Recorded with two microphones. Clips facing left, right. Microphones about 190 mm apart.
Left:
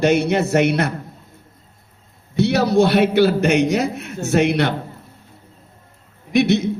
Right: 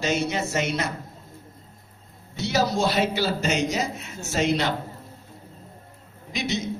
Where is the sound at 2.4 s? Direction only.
60° left (ahead or behind).